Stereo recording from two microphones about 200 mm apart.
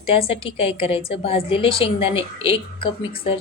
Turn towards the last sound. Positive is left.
turn(degrees=25)  # may be behind; listen again after turning